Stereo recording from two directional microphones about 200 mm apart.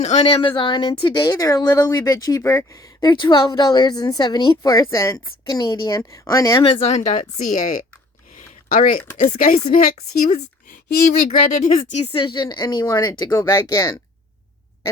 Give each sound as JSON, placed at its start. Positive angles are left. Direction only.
{"t": 0.0, "sound": "speech", "side_deg": 30}
{"t": 8.4, "sound": "a sound", "side_deg": 45}
{"t": 9.1, "sound": "speech", "side_deg": 45}
{"t": 12.1, "sound": "speech", "side_deg": 25}